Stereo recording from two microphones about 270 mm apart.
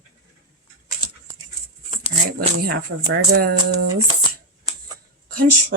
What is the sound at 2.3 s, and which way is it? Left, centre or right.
Speech, right.